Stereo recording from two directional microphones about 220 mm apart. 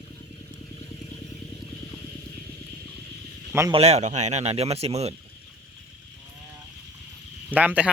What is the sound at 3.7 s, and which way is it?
Speech, 30° right (ahead or behind).